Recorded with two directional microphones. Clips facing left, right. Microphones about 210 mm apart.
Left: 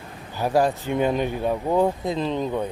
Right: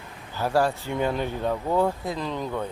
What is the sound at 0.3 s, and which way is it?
Speech, 15° left (ahead or behind).